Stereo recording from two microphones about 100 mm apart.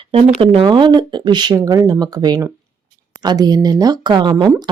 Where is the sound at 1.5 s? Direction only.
35° right (ahead or behind); by 4.5 s 50° right (ahead or behind).